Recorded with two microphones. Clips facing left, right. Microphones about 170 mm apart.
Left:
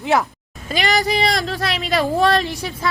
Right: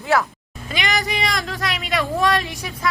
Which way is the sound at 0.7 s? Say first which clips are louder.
Left 5 dB; 35° left (ahead or behind).